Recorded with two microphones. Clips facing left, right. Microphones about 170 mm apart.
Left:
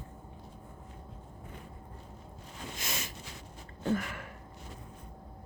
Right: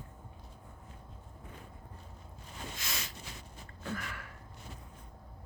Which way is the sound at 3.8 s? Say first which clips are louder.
Left 9 dB; 25° left (ahead or behind).